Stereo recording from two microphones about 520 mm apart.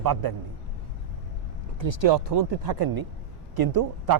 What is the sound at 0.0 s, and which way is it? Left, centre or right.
Speech, right.